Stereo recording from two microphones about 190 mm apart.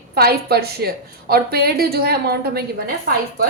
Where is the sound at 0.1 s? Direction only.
55° right (ahead or behind).